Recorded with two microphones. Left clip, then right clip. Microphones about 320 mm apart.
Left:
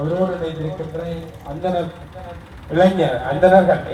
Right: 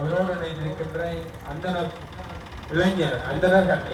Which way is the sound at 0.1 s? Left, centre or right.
Centre.